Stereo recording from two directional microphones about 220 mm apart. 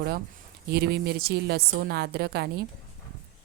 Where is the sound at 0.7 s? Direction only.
45° right (ahead or behind).